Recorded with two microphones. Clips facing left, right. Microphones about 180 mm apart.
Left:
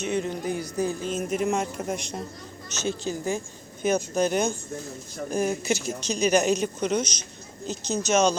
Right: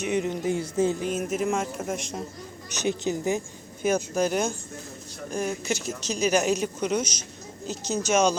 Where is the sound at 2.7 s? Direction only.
15° right (ahead or behind).